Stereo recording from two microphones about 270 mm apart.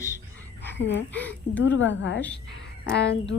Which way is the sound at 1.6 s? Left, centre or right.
Left.